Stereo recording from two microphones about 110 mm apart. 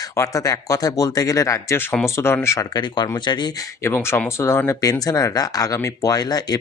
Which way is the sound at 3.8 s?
25° left (ahead or behind).